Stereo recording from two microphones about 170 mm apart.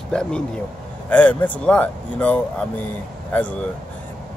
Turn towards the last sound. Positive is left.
turn(degrees=10)  # may be behind; listen again after turning